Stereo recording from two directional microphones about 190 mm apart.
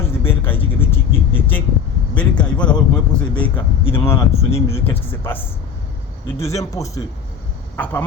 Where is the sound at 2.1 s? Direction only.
5° left (ahead or behind).